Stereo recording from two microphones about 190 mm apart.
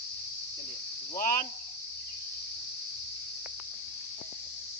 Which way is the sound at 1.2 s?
45° left (ahead or behind).